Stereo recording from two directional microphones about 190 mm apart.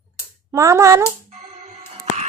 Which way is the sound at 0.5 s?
15° right (ahead or behind).